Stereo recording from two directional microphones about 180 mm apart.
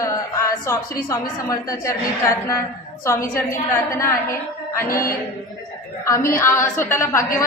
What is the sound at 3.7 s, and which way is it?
Speech, 15° left (ahead or behind).